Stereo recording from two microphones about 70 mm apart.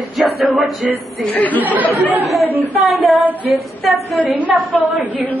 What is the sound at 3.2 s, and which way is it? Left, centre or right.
Female singing, right.